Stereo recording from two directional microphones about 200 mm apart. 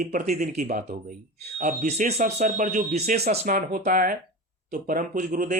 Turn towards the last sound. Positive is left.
turn(degrees=-40)  # may be behind; listen again after turning